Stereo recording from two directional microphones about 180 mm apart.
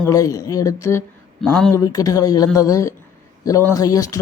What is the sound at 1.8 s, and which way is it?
A woman's voice, 20° left (ahead or behind).